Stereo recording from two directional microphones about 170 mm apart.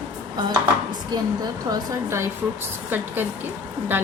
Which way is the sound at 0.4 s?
25° right (ahead or behind).